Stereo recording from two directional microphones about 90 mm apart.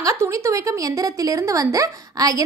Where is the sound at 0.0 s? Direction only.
35° right (ahead or behind).